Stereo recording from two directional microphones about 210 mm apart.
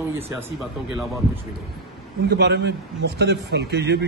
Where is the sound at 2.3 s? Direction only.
50° right (ahead or behind).